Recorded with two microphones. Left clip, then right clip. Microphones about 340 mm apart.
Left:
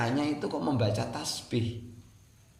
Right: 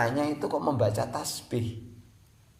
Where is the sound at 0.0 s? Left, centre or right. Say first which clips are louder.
Right 3 dB; right.